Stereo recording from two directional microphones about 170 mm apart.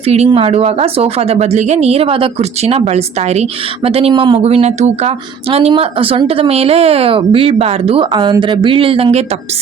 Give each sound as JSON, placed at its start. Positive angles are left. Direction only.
{"t": 0.0, "sound": "speech", "side_deg": -40}